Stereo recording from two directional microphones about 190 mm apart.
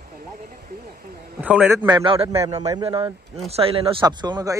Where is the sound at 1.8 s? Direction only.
25° right (ahead or behind).